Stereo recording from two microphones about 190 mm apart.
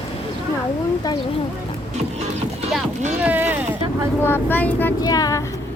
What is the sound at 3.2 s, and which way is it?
Speech, 10° right (ahead or behind).